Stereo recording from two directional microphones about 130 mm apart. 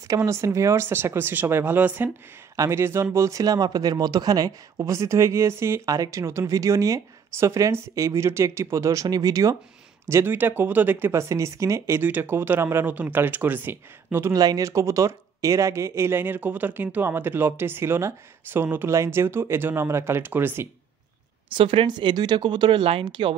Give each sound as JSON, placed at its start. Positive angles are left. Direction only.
{"t": 0.1, "sound": "speech", "side_deg": -25}
{"t": 21.5, "sound": "speech", "side_deg": -40}